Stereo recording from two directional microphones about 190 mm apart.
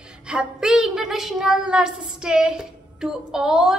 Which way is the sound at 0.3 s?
5° right (ahead or behind).